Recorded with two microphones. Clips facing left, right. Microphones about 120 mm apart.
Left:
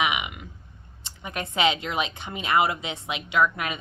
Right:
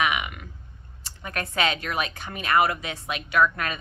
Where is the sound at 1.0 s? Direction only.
20° left (ahead or behind).